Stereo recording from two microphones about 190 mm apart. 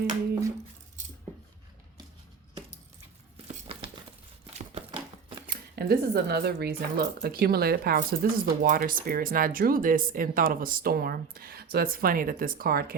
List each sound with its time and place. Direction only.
3.3 s crumpling: 30° right (ahead or behind)
5.5 s speech: 55° right (ahead or behind)